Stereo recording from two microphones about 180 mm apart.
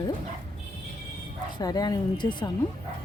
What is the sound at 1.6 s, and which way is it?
Speech, 20° left (ahead or behind).